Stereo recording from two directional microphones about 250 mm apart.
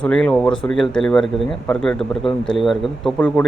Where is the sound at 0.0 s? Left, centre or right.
Centre.